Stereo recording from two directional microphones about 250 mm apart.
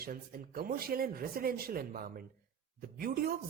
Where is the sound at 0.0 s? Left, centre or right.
Right.